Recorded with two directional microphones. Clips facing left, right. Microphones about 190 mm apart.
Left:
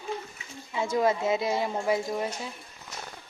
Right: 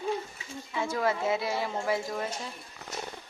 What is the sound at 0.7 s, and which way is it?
Speech, 20° left (ahead or behind).